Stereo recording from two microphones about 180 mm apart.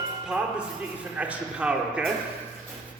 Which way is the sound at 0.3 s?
5° right (ahead or behind).